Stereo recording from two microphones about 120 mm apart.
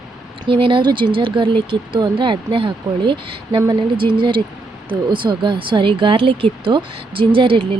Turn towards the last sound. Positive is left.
turn(degrees=-45)  # may be behind; listen again after turning